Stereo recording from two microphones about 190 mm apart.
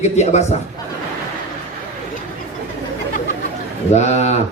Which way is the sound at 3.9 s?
35° left (ahead or behind).